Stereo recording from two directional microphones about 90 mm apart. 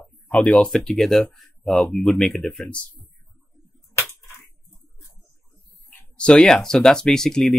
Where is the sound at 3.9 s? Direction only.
30° left (ahead or behind).